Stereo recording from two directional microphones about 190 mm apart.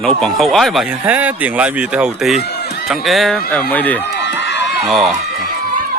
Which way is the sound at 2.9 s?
Centre (ahead or behind).